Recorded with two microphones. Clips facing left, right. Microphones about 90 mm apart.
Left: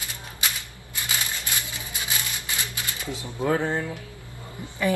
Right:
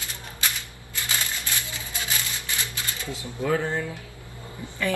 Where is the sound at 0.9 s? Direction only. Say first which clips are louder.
Even; 20° left (ahead or behind).